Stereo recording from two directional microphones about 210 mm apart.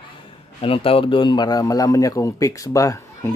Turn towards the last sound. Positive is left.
turn(degrees=15)  # may be behind; listen again after turning